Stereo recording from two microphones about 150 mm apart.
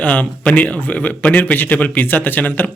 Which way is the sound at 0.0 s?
10° left (ahead or behind).